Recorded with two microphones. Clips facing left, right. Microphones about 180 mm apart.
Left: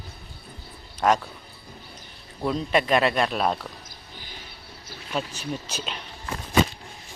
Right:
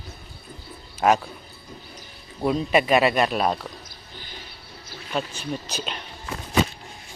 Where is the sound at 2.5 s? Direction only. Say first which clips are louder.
Right 3 dB; 10° right (ahead or behind).